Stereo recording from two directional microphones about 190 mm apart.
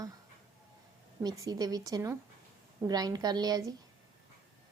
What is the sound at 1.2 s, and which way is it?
A woman's voice, 20° right (ahead or behind).